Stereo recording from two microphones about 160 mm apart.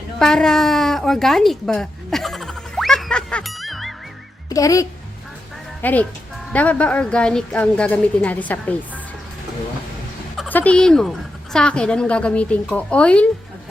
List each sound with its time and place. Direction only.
0.2 s a sound: 5° left (ahead or behind)
4.4 s speech: 20° left (ahead or behind)
5.8 s a woman's voice: 10° left (ahead or behind)
10.5 s a woman's voice: 10° left (ahead or behind)